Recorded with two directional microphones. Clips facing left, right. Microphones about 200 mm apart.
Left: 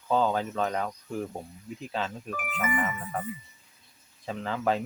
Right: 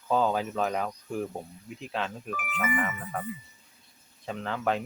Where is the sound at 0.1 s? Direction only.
5° right (ahead or behind).